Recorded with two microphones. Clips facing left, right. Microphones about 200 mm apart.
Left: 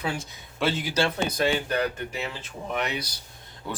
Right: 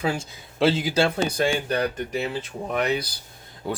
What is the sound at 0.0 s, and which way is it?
Speech, 30° right (ahead or behind).